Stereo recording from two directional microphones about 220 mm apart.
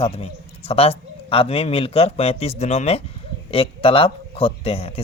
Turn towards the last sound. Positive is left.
turn(degrees=25)  # may be behind; listen again after turning